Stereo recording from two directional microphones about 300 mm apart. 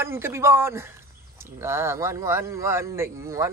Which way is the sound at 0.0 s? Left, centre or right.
Centre.